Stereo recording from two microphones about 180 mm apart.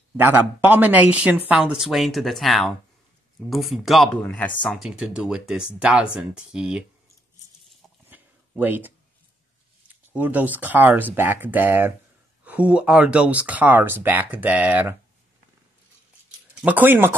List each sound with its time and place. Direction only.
0.2 s speech: 10° right (ahead or behind)
8.1 s a sound: 10° right (ahead or behind)
10.1 s speech: 10° right (ahead or behind)
16.6 s speech: 10° right (ahead or behind)